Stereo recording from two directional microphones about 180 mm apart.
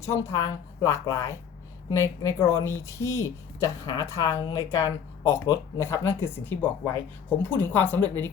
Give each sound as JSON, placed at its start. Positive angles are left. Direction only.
{"t": 0.0, "sound": "a woman's voice", "side_deg": 15}